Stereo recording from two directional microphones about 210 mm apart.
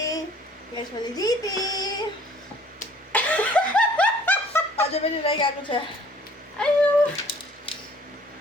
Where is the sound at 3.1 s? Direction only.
5° left (ahead or behind).